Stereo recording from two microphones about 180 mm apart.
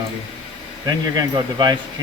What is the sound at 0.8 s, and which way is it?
Speech, 20° right (ahead or behind).